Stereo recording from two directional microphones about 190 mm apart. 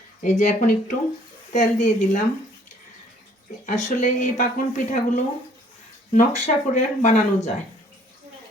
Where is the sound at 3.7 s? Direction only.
45° left (ahead or behind).